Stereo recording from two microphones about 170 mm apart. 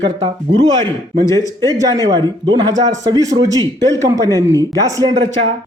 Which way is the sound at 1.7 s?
20° right (ahead or behind).